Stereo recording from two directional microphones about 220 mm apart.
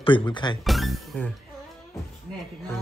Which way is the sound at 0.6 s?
Centre (ahead or behind).